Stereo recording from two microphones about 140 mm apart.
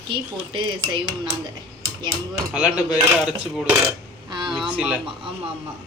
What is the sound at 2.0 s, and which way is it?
Dishes, 5° right (ahead or behind).